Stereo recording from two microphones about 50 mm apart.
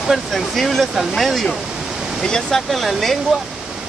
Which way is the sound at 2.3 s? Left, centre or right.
Centre.